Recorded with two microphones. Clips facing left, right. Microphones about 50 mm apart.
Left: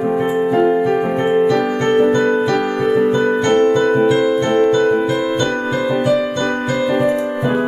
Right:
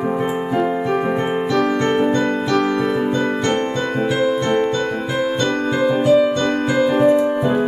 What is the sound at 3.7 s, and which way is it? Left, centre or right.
Piano, centre.